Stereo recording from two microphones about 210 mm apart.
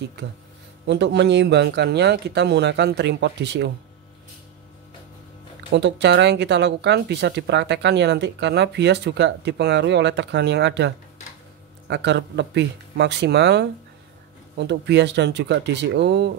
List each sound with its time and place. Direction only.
0.8 s speech: 55° right (ahead or behind)
5.7 s speech: 55° right (ahead or behind)
11.9 s speech: 55° right (ahead or behind)